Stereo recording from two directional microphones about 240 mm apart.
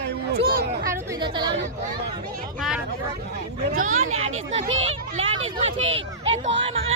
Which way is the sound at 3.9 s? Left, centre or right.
Right.